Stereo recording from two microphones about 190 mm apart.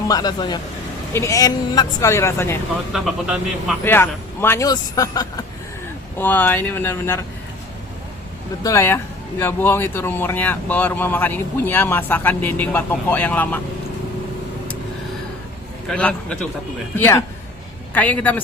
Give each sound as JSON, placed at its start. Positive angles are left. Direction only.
{"t": 0.1, "sound": "speech", "side_deg": 20}
{"t": 2.9, "sound": "speech", "side_deg": 0}
{"t": 3.8, "sound": "speech", "side_deg": 10}
{"t": 8.6, "sound": "speech", "side_deg": 15}
{"t": 15.9, "sound": "speech", "side_deg": 5}